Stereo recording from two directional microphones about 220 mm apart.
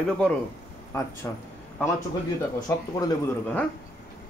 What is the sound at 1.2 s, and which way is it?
Speech, 15° left (ahead or behind).